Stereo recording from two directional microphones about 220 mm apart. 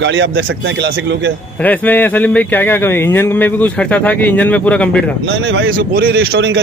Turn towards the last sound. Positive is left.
turn(degrees=-50)  # may be behind; listen again after turning